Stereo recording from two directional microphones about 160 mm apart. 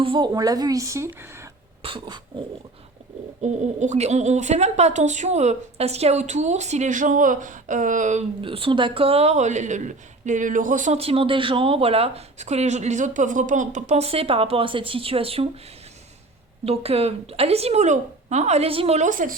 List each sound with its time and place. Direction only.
0.0 s a woman's voice: 30° right (ahead or behind)
1.8 s dog: 30° right (ahead or behind)
3.4 s a woman's voice: 45° right (ahead or behind)
8.4 s a woman's voice: 35° right (ahead or behind); by 10.9 s 55° right (ahead or behind)
10.9 s speech: 35° right (ahead or behind)
16.6 s speech: 40° right (ahead or behind)